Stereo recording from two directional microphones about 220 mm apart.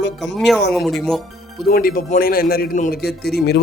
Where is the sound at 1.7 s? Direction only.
40° left (ahead or behind).